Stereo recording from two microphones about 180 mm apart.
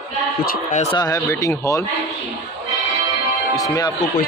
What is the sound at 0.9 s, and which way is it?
Speech, 20° left (ahead or behind).